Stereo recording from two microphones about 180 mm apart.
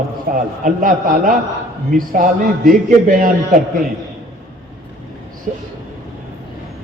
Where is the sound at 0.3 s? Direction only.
50° right (ahead or behind).